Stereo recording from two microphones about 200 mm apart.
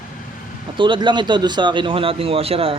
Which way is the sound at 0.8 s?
25° right (ahead or behind).